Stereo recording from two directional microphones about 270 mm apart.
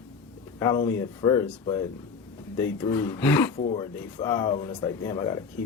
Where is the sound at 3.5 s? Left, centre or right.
Left.